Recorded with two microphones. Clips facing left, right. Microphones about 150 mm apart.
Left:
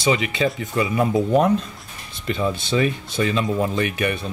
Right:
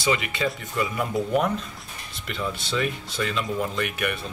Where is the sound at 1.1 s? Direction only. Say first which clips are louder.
Left 5 dB; 30° left (ahead or behind).